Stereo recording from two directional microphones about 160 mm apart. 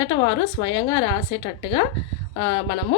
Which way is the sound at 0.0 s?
30° left (ahead or behind).